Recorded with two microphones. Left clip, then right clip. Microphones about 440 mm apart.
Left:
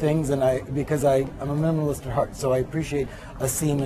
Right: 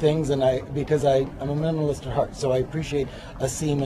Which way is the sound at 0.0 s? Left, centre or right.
Left.